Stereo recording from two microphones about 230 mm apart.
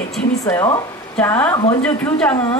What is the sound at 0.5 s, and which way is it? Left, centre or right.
A woman's voice, centre.